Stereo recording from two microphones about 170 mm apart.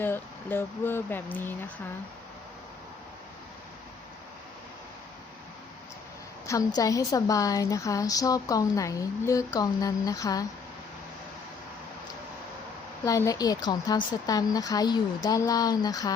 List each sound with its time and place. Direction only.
0.0 s speech: 10° left (ahead or behind)
6.5 s speech: 20° left (ahead or behind)
13.1 s speech: 20° left (ahead or behind)